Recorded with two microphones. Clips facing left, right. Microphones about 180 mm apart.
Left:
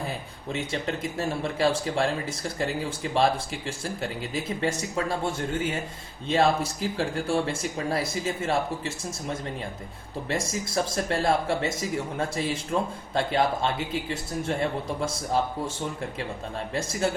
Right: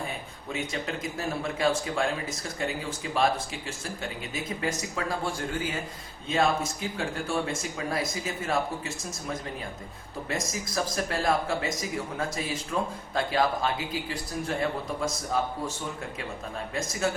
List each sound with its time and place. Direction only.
1.2 s speech: 30° left (ahead or behind)